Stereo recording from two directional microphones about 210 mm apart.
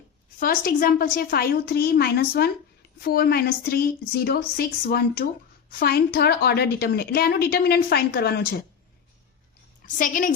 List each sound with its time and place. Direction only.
0.3 s a woman's voice: 45° left (ahead or behind)
9.8 s a woman's voice: 40° left (ahead or behind)